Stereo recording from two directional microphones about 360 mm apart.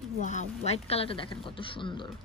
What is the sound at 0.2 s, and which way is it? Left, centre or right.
A woman's voice, centre.